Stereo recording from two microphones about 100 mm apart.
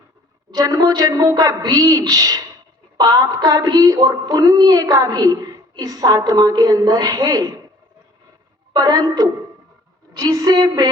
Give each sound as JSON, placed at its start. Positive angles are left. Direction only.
{"t": 0.5, "sound": "a woman's voice", "side_deg": -40}
{"t": 8.7, "sound": "a woman's voice", "side_deg": -40}